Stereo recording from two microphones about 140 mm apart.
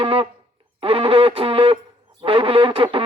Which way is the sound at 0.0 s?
40° right (ahead or behind).